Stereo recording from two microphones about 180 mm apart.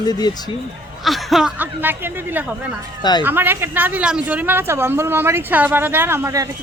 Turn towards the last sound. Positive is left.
turn(degrees=-15)  # may be behind; listen again after turning